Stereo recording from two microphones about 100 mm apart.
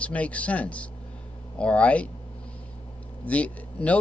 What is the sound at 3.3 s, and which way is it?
Speech, 15° left (ahead or behind).